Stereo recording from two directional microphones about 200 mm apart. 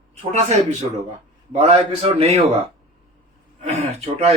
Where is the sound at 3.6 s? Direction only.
35° right (ahead or behind).